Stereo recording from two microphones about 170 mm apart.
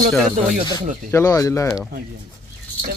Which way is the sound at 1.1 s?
15° left (ahead or behind).